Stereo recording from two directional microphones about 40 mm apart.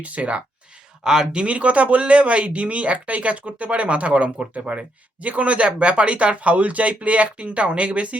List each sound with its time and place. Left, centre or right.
0.0 s speech: right
1.0 s speech: centre; by 8.2 s right